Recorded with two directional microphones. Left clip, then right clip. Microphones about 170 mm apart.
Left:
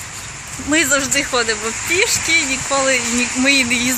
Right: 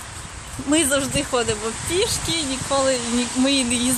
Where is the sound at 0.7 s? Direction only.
5° right (ahead or behind).